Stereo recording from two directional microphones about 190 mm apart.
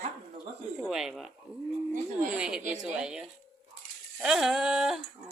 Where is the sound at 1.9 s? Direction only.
45° right (ahead or behind).